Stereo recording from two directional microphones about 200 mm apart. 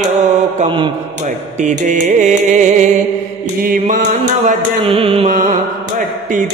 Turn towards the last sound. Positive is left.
turn(degrees=-40)  # may be behind; listen again after turning